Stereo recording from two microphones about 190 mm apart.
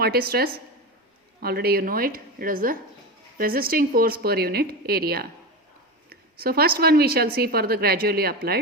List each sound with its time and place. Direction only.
0.0 s speech: 55° right (ahead or behind)